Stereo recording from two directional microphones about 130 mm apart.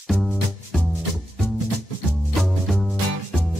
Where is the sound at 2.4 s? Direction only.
Centre (ahead or behind).